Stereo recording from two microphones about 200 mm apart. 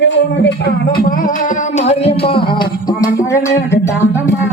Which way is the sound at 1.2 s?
40° left (ahead or behind).